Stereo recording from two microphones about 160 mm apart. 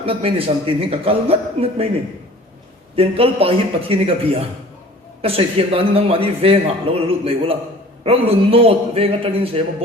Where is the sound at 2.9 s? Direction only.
35° right (ahead or behind).